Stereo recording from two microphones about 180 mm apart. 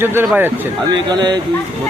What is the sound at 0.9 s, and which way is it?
Speech, 25° right (ahead or behind).